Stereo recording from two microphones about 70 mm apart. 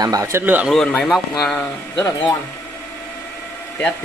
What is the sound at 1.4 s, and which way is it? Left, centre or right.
Speech, centre.